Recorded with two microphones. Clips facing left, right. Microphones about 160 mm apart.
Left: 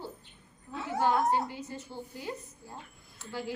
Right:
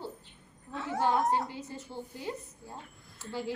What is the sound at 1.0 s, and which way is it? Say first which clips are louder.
Speech: left 1 dB; 25° right (ahead or behind).